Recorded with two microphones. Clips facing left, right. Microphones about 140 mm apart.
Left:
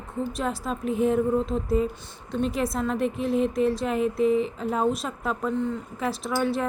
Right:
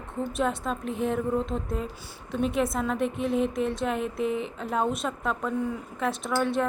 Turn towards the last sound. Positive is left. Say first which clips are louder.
# even
turn(degrees=0)  # may be behind; listen again after turning